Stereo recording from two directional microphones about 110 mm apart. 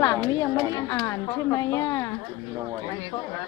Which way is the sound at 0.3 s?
35° left (ahead or behind).